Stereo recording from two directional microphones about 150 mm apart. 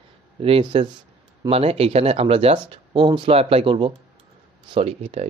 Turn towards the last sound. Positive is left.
turn(degrees=-45)  # may be behind; listen again after turning